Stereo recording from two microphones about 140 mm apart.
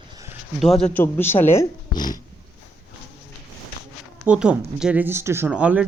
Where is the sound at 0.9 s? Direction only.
15° left (ahead or behind).